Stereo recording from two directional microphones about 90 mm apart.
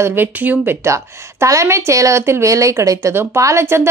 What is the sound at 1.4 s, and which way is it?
A woman's voice, 35° right (ahead or behind).